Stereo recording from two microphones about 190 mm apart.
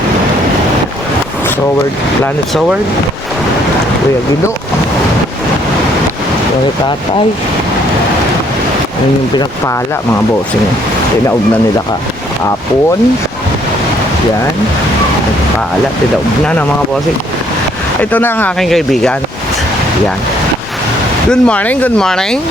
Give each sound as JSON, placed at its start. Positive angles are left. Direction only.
{"t": 9.3, "sound": "speech", "side_deg": 20}
{"t": 18.0, "sound": "speech", "side_deg": 10}
{"t": 21.2, "sound": "speech", "side_deg": 5}